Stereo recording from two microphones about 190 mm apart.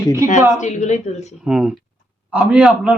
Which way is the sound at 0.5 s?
40° left (ahead or behind).